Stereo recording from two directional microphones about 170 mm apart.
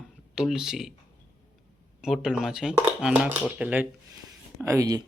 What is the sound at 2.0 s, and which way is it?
Speech, centre (ahead or behind).